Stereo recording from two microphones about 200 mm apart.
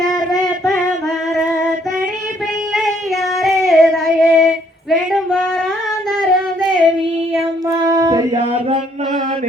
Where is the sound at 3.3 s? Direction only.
Centre (ahead or behind).